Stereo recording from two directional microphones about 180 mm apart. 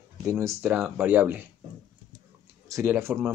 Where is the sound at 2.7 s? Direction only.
15° right (ahead or behind).